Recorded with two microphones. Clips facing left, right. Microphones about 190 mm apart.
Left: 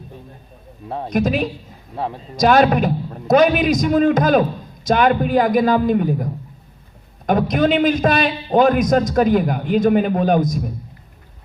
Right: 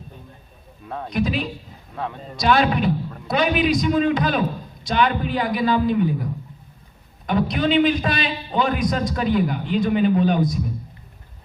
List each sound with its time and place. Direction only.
0.9 s speech: 30° left (ahead or behind)
1.1 s a man's voice: 45° left (ahead or behind)
1.9 s a man's voice: 30° left (ahead or behind)
2.3 s a man's voice: 45° left (ahead or behind)
7.3 s a man's voice: 45° left (ahead or behind)